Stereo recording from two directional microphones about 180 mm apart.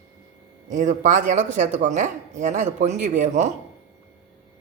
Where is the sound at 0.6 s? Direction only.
45° right (ahead or behind).